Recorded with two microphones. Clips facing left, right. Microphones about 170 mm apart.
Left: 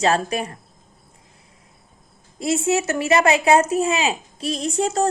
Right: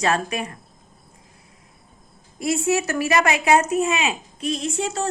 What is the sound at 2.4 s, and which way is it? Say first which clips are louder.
A woman's voice: left 1 dB; 25° left (ahead or behind).